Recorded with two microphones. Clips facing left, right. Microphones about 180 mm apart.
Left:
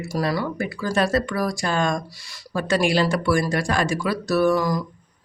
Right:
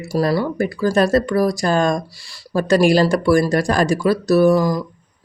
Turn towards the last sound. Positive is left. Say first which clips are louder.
# right 5 dB
turn(degrees=-30)  # may be behind; listen again after turning